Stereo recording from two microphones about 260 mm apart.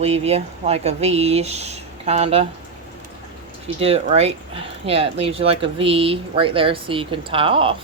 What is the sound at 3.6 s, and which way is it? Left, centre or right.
Speech, right.